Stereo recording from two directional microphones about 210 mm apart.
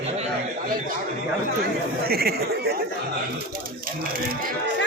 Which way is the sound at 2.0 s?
45° right (ahead or behind).